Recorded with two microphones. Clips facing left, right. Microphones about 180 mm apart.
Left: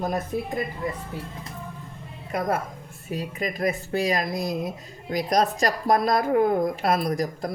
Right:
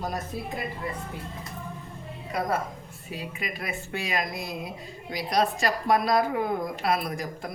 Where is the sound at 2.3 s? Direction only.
50° left (ahead or behind).